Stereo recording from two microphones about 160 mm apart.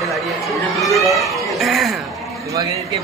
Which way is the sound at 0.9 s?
Centre (ahead or behind).